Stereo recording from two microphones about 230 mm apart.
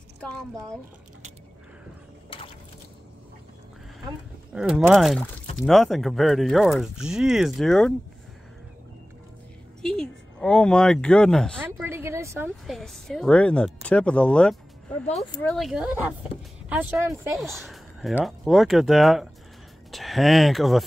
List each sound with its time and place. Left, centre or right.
2.2 s a sound: left
4.6 s speech: centre
9.8 s speech: centre
11.6 s a sound: centre
12.4 s speech: centre
17.4 s speech: centre